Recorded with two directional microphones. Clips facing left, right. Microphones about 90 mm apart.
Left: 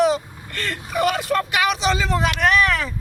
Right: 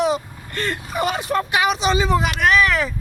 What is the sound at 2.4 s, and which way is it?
Speech, centre (ahead or behind).